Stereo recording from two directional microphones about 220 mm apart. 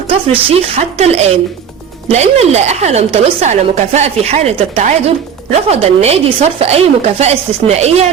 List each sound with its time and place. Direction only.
0.4 s a woman's voice: 25° right (ahead or behind)